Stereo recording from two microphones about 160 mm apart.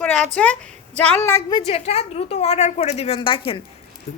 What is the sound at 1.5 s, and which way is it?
A woman's voice, 40° left (ahead or behind).